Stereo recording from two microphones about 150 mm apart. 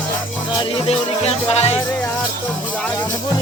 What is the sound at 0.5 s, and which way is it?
Music, 45° left (ahead or behind).